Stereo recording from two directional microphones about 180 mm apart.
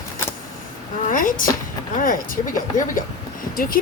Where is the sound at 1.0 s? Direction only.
50° left (ahead or behind).